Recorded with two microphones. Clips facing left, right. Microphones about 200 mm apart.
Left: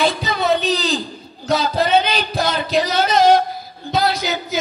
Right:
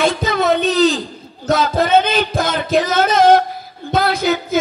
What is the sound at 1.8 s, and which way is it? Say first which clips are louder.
Music: right 3 dB; 50° right (ahead or behind).